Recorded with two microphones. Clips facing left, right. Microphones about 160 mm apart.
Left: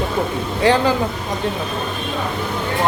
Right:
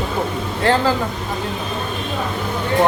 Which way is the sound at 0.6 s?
15° left (ahead or behind).